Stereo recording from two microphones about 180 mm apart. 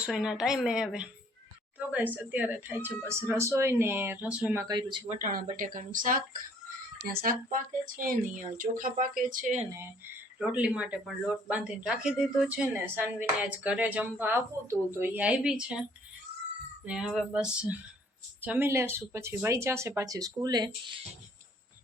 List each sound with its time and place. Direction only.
0.0 s a woman's voice: 5° right (ahead or behind)
4.7 s speech: 25° right (ahead or behind)
5.0 s speech: 50° right (ahead or behind)
10.3 s speech: 5° right (ahead or behind)
16.8 s a woman's voice: 5° right (ahead or behind); by 21.0 s 25° right (ahead or behind)